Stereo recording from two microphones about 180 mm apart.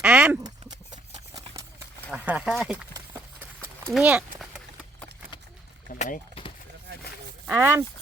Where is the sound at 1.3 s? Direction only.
20° right (ahead or behind).